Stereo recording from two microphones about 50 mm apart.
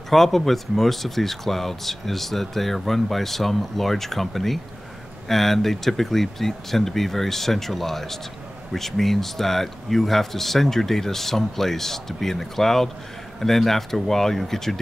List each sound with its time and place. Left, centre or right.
0.1 s a man's voice: centre